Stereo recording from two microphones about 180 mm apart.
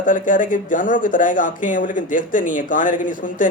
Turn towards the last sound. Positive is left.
turn(degrees=45)  # may be behind; listen again after turning